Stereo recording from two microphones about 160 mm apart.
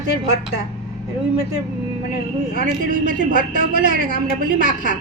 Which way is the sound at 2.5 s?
55° right (ahead or behind).